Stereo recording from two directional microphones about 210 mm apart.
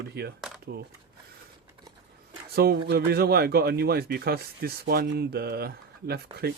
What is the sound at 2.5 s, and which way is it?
Speech, 50° right (ahead or behind).